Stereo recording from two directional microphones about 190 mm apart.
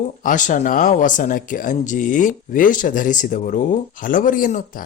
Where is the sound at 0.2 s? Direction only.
45° left (ahead or behind).